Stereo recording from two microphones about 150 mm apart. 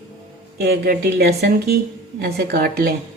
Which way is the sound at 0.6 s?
90° right.